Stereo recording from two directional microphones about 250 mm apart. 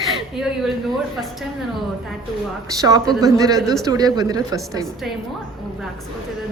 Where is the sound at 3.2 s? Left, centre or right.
Centre.